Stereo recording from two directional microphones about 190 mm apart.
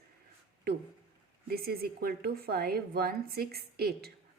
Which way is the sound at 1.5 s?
55° right (ahead or behind).